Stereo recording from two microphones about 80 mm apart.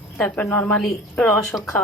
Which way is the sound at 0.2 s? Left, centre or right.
Centre.